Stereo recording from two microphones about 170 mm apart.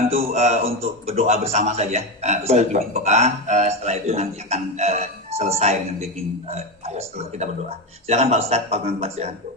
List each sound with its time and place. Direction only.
0.3 s a man's voice: 40° right (ahead or behind)